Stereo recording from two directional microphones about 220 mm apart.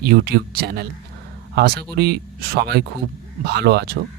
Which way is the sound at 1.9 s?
45° right (ahead or behind).